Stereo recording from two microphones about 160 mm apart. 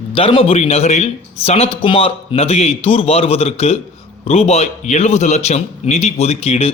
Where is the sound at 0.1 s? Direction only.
35° left (ahead or behind).